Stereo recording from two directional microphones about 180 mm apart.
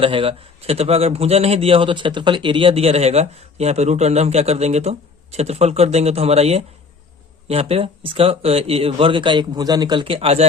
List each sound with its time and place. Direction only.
0.0 s a man's voice: 30° right (ahead or behind)